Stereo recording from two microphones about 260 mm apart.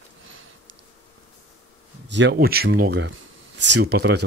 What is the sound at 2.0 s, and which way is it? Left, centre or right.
Speech, right.